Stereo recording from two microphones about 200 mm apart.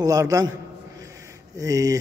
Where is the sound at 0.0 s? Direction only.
15° right (ahead or behind).